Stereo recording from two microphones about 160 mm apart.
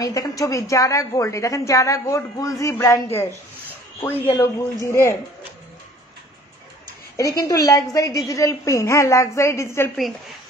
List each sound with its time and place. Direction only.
0.0 s a woman's voice: 20° left (ahead or behind)
7.2 s a woman's voice: 20° left (ahead or behind)